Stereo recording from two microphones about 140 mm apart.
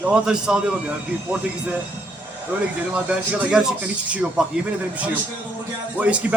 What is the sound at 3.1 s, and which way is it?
A man's voice, 5° right (ahead or behind).